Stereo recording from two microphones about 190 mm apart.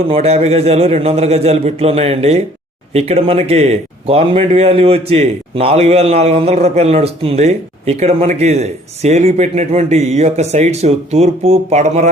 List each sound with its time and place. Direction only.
0.1 s speech: 35° right (ahead or behind)